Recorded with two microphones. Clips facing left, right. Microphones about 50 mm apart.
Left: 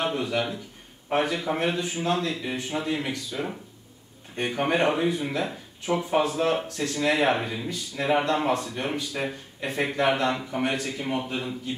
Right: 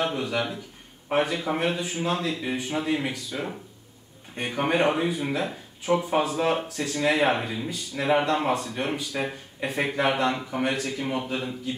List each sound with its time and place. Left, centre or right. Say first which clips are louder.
0.1 s speech: left 1 dB; centre